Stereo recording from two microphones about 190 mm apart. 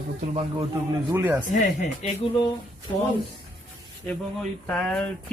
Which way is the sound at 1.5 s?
35° left (ahead or behind).